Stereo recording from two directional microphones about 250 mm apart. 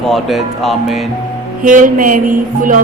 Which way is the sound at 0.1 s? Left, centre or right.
Centre.